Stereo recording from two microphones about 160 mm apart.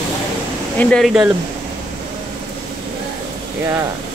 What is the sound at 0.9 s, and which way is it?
Speech, centre (ahead or behind).